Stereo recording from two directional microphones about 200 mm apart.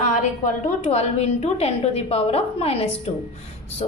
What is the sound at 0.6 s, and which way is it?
A woman's voice, 30° left (ahead or behind).